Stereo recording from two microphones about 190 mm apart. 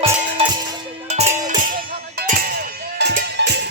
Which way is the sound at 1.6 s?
45° right (ahead or behind).